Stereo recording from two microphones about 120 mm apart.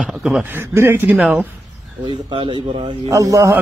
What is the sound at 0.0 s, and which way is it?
Speech, 5° right (ahead or behind).